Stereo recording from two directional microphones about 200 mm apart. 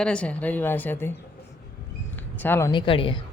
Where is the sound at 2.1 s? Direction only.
10° left (ahead or behind).